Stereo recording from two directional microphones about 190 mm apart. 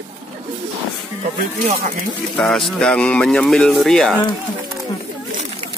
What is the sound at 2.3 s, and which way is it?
Speech, centre (ahead or behind).